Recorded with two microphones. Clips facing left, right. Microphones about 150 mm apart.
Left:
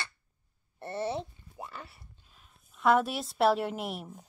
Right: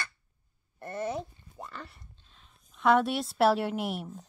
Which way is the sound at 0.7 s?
30° left (ahead or behind).